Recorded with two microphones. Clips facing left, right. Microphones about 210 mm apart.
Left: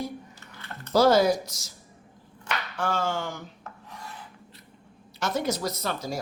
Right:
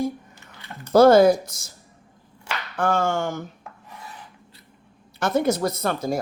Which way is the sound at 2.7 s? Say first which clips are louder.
Right 7 dB; 55° right (ahead or behind).